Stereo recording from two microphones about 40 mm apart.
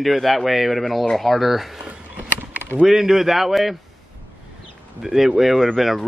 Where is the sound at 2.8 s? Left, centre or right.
Centre.